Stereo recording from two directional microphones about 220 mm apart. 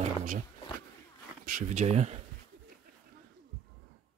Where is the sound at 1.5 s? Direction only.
35° right (ahead or behind).